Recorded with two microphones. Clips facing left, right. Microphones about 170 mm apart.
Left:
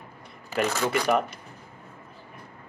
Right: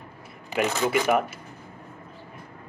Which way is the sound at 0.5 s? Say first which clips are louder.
Right 1 dB; 15° right (ahead or behind).